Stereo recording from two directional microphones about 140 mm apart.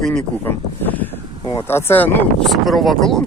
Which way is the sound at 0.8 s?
10° left (ahead or behind).